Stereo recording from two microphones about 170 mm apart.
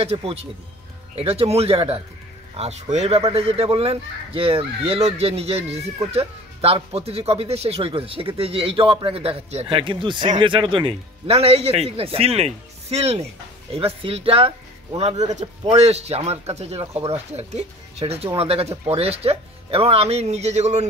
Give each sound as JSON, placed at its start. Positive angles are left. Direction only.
{"t": 0.0, "sound": "a man's voice", "side_deg": -35}